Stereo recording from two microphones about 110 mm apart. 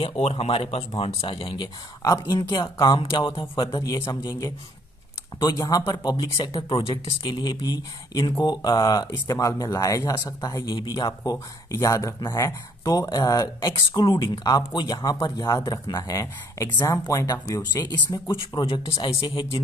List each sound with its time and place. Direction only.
0.0 s speech: 65° left (ahead or behind); by 3.0 s 35° left (ahead or behind)
3.0 s speech: 50° left (ahead or behind)
3.7 s speech: 30° left (ahead or behind); by 19.6 s 50° left (ahead or behind)